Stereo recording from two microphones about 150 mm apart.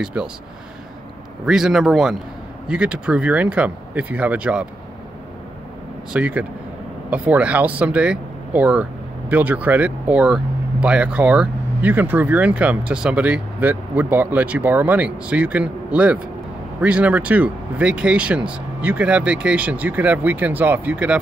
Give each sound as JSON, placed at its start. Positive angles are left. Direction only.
{"t": 0.0, "sound": "a man's voice", "side_deg": -5}
{"t": 1.4, "sound": "a man's voice", "side_deg": -5}
{"t": 6.1, "sound": "speech", "side_deg": -10}